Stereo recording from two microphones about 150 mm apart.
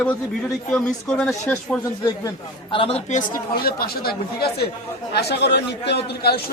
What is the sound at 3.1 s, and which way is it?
A man's voice, 65° left (ahead or behind).